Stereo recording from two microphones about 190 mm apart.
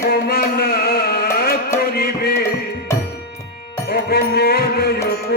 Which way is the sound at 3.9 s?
55° left (ahead or behind).